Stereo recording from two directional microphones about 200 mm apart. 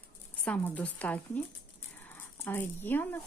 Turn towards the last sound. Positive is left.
turn(degrees=10)  # may be behind; listen again after turning